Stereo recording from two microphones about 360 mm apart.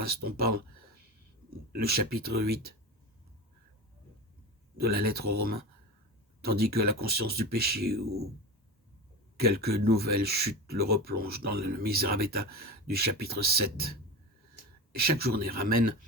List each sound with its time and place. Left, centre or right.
0.0 s speech: right
1.7 s speech: right
4.8 s speech: right
9.4 s speech: right
14.9 s speech: right